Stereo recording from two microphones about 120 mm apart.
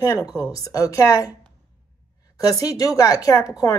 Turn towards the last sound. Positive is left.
turn(degrees=30)  # may be behind; listen again after turning